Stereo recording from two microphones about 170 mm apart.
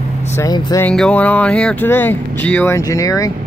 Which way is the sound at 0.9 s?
5° left (ahead or behind).